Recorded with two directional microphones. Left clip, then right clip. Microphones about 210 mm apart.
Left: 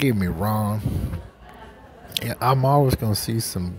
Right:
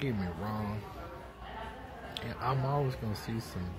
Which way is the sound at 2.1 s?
50° left (ahead or behind).